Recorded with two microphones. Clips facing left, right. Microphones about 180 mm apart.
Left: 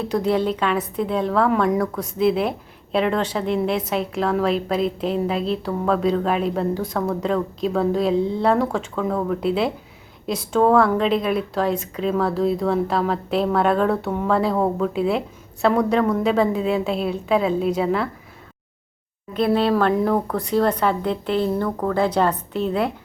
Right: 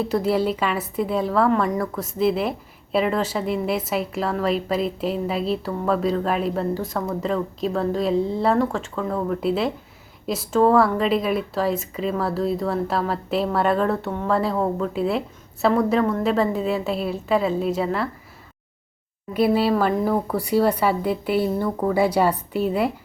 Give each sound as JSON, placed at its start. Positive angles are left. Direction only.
{"t": 0.0, "sound": "speech", "side_deg": -5}
{"t": 19.3, "sound": "speech", "side_deg": -5}